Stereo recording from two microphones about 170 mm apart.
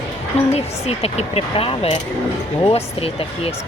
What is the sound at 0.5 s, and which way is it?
Speech, 35° left (ahead or behind).